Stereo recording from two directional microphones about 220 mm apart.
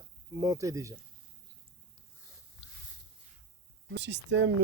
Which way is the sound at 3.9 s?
50° right (ahead or behind).